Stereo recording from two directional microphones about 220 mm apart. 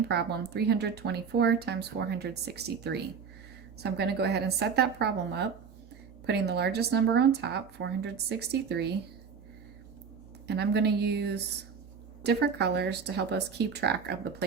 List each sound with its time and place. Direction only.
0.1 s speech: 50° right (ahead or behind)
10.4 s speech: 50° right (ahead or behind)